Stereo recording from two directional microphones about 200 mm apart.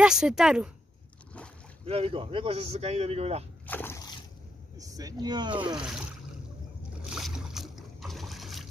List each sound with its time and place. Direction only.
0.0 s speech: 5° right (ahead or behind)
1.9 s a man's voice: 30° right (ahead or behind)
3.6 s boat: 10° left (ahead or behind)
4.7 s speech: 15° right (ahead or behind)
5.8 s speech: 5° right (ahead or behind)
7.1 s boat: centre (ahead or behind)